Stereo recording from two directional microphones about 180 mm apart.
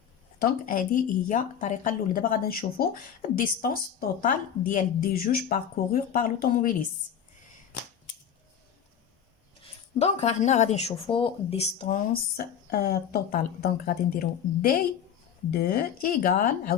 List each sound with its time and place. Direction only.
0.3 s speech: 55° left (ahead or behind)
10.0 s speech: 35° left (ahead or behind)
12.7 s speech: 60° left (ahead or behind)